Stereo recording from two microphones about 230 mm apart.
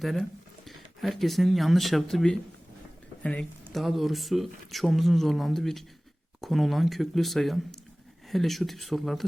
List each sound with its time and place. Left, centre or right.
0.0 s speech: centre